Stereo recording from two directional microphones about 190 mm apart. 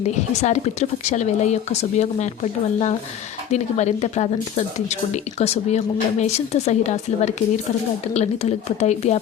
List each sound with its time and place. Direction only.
0.4 s speech: 35° left (ahead or behind)